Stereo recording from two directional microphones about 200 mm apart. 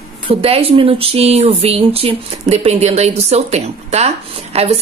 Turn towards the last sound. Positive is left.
turn(degrees=-30)  # may be behind; listen again after turning